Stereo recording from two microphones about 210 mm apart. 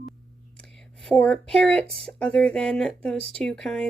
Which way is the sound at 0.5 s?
5° left (ahead or behind).